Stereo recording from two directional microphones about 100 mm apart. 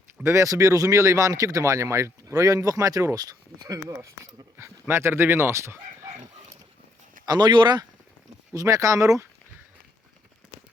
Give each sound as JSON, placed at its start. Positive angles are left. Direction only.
{"t": 0.2, "sound": "speech", "side_deg": -30}
{"t": 7.3, "sound": "speech", "side_deg": -45}
{"t": 8.5, "sound": "speech", "side_deg": -35}